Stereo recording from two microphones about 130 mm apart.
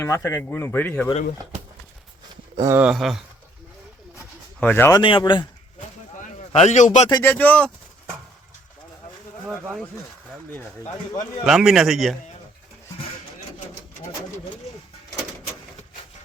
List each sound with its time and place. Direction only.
0.0 s speech: 20° left (ahead or behind)
2.3 s a sound: 35° right (ahead or behind)
2.9 s speech: centre (ahead or behind)
4.6 s speech: 15° left (ahead or behind)
4.9 s speech: 40° left (ahead or behind)
6.5 s a man's voice: 60° left (ahead or behind)
7.2 s speech: 15° left (ahead or behind)
11.4 s speech: centre (ahead or behind)